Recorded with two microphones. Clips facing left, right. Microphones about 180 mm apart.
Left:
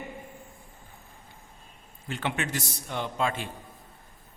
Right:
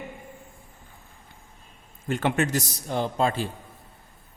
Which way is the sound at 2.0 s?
45° right (ahead or behind).